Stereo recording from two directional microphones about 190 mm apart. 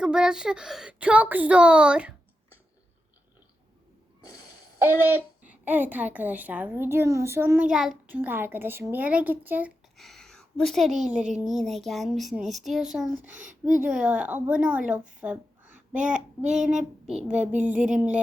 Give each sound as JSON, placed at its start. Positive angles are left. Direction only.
{"t": 0.0, "sound": "a child's voice", "side_deg": -5}
{"t": 4.8, "sound": "a child's voice", "side_deg": -10}
{"t": 11.3, "sound": "a sound", "side_deg": 0}
{"t": 13.5, "sound": "speech", "side_deg": -45}
{"t": 13.8, "sound": "a child's voice", "side_deg": -5}
{"t": 15.2, "sound": "a sound", "side_deg": -5}
{"t": 16.0, "sound": "child singing", "side_deg": -5}
{"t": 16.6, "sound": "a child's voice", "side_deg": -5}